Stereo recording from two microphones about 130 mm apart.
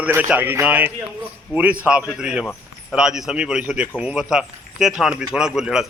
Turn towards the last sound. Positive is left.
turn(degrees=-5)  # may be behind; listen again after turning